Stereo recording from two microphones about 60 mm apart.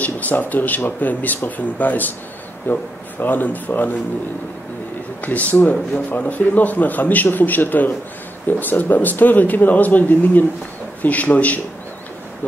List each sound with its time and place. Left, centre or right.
0.0 s a man's voice: left
5.2 s a man's voice: left